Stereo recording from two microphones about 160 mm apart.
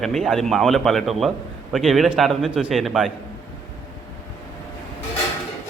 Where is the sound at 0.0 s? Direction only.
Centre (ahead or behind).